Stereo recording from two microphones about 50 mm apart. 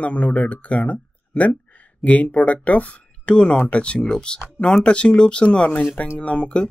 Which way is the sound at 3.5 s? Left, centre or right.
Left.